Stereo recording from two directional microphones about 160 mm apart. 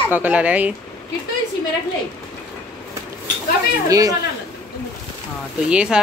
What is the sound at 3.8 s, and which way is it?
Speech, 20° right (ahead or behind).